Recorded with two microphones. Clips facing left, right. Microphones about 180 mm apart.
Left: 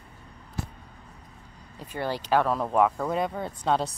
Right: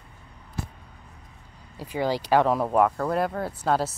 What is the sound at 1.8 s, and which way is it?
Speech, 10° right (ahead or behind).